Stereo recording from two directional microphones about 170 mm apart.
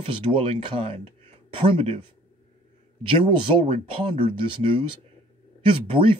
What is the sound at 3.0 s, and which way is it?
Speech, 30° right (ahead or behind).